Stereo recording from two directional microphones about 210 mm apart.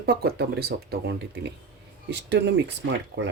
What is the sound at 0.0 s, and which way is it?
Speech, 50° right (ahead or behind).